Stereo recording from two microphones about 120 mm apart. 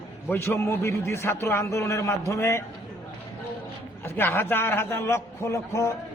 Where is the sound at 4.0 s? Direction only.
20° left (ahead or behind).